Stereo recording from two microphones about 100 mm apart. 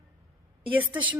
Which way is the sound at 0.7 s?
15° right (ahead or behind).